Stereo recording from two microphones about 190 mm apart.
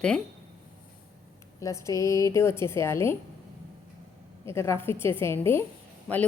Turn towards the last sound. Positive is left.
turn(degrees=5)  # may be behind; listen again after turning